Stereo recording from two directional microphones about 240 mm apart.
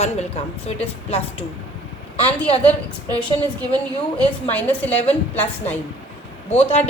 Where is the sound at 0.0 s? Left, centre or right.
Left.